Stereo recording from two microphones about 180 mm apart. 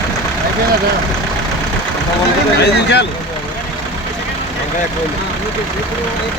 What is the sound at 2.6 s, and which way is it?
Speech, 70° left (ahead or behind).